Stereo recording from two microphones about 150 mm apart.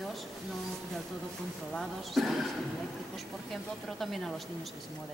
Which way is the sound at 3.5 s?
Centre (ahead or behind).